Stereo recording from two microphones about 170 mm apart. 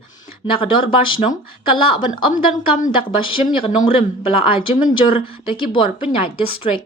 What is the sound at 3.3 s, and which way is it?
Speech, 30° left (ahead or behind).